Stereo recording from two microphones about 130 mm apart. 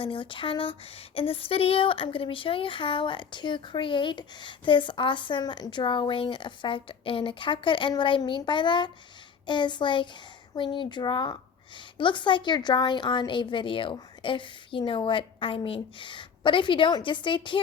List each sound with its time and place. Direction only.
0.0 s speech: 40° left (ahead or behind)